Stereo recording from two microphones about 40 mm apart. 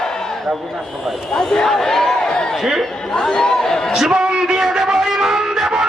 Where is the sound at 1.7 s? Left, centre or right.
Centre.